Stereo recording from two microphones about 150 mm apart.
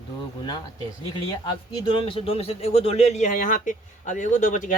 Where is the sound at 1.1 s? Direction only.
30° left (ahead or behind).